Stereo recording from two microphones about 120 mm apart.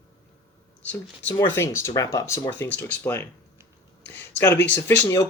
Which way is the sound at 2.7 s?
15° left (ahead or behind).